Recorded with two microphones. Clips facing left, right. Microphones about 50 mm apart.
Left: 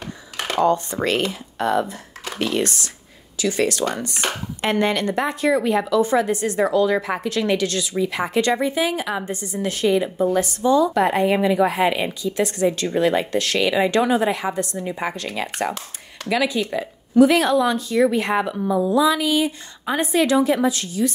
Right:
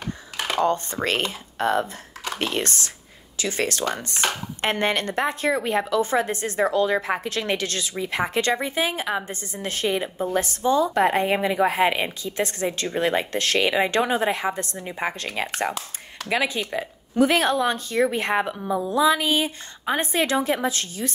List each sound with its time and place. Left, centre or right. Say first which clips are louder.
1.6 s a woman's voice: left 2 dB; right